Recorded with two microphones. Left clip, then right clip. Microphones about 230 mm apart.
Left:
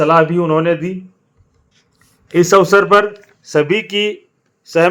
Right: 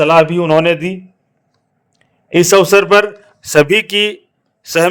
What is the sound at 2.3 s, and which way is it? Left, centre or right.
A man's voice, right.